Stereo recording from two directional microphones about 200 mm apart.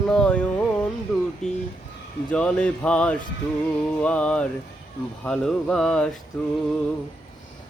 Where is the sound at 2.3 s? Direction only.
5° left (ahead or behind).